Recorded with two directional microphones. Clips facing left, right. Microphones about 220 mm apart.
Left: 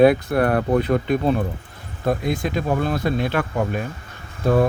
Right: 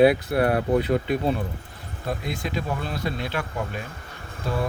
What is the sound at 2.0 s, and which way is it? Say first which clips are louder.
Speech: left 8 dB; 50° left (ahead or behind).